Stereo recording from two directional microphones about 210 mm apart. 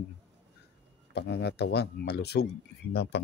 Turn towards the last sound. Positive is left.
turn(degrees=55)  # may be behind; listen again after turning